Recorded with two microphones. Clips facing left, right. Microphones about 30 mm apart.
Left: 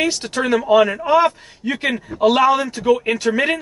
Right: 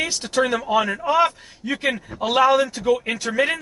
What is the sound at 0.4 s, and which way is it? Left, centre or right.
Speech, centre.